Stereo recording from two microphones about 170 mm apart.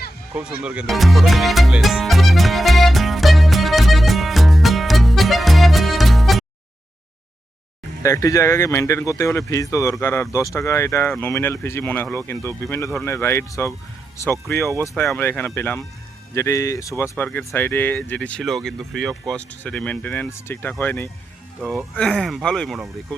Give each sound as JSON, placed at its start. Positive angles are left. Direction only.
{"t": 0.3, "sound": "music", "side_deg": -5}
{"t": 8.0, "sound": "speech", "side_deg": 20}
{"t": 14.8, "sound": "speech", "side_deg": 10}
{"t": 21.6, "sound": "speech", "side_deg": -5}